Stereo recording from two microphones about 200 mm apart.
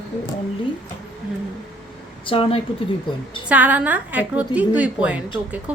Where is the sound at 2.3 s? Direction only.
30° left (ahead or behind).